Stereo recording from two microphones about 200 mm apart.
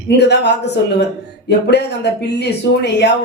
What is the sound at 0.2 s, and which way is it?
Speech, 60° left (ahead or behind).